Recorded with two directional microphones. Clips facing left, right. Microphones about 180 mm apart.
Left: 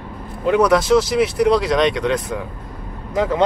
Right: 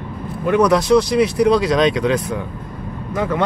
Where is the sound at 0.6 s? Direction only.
Centre (ahead or behind).